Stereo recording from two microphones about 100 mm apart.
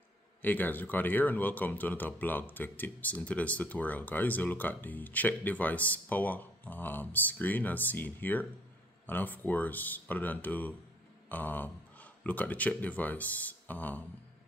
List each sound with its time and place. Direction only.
0.4 s speech: 20° left (ahead or behind)